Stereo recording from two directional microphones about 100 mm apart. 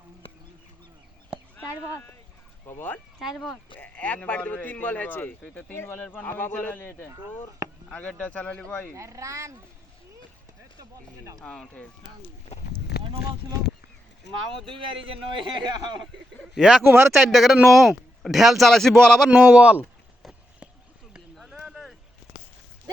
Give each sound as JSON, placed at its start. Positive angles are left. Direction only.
{"t": 1.5, "sound": "speech", "side_deg": 25}
{"t": 3.2, "sound": "speech", "side_deg": 0}
{"t": 3.8, "sound": "a man's voice", "side_deg": 15}
{"t": 9.0, "sound": "speech", "side_deg": -30}
{"t": 11.3, "sound": "speech", "side_deg": 5}
{"t": 14.7, "sound": "a man's voice", "side_deg": -60}
{"t": 16.6, "sound": "speech", "side_deg": -5}
{"t": 19.3, "sound": "speech", "side_deg": -15}
{"t": 21.3, "sound": "a sound", "side_deg": -5}